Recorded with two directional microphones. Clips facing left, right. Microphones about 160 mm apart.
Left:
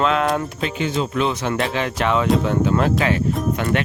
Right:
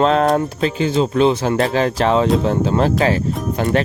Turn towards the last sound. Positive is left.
turn(degrees=-35)  # may be behind; listen again after turning